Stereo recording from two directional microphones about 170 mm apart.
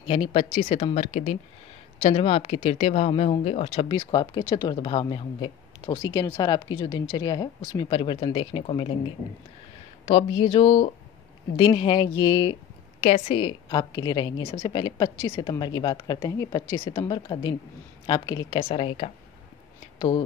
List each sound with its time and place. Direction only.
0.0 s speech: 35° left (ahead or behind)
10.0 s speech: 30° left (ahead or behind)
13.0 s speech: 35° left (ahead or behind)
18.6 s speech: 35° left (ahead or behind)